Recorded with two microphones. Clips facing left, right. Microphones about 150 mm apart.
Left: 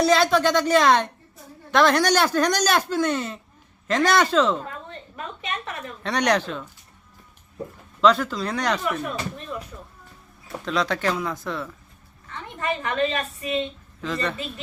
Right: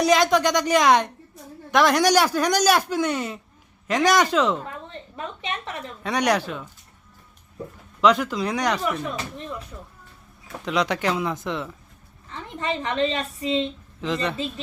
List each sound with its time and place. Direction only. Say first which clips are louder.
0.0 s speech: even; 15° right (ahead or behind)
6.0 s speech: even; 10° right (ahead or behind)
8.0 s speech: even; 15° right (ahead or behind)
10.7 s a woman's voice: right 1 dB; 15° right (ahead or behind)